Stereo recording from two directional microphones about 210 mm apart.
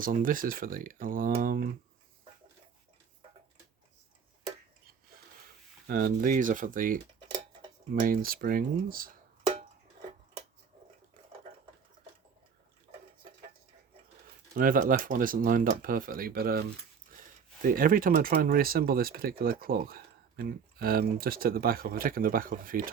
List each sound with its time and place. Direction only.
0.0 s speech: 40° right (ahead or behind)
6.2 s speech: 40° right (ahead or behind)
7.3 s dishes: 20° right (ahead or behind)
7.9 s speech: 40° right (ahead or behind)
14.5 s speech: 40° right (ahead or behind)
17.7 s speech: 40° right (ahead or behind)